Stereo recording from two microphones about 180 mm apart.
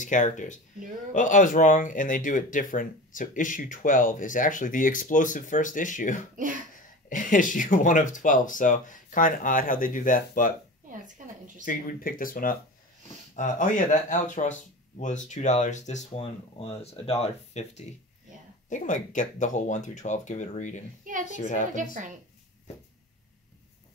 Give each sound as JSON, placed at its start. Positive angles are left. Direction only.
{"t": 0.0, "sound": "speech", "side_deg": 45}
{"t": 6.3, "sound": "a woman's voice", "side_deg": -45}
{"t": 7.1, "sound": "speech", "side_deg": 45}
{"t": 11.6, "sound": "speech", "side_deg": 50}
{"t": 21.7, "sound": "a woman's voice", "side_deg": -45}